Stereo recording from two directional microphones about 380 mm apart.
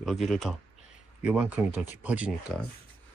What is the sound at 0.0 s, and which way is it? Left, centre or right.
Speech, centre.